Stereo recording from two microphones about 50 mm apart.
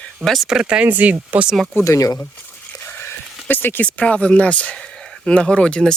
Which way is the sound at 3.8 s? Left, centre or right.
Left.